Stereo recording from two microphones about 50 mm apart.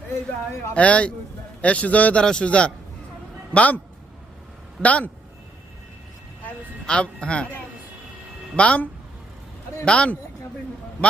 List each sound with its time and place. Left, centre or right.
0.7 s speech: left
2.2 s speech: centre
4.8 s speech: left
6.8 s speech: centre
8.5 s speech: left